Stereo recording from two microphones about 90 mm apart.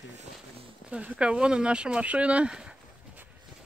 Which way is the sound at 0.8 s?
15° right (ahead or behind).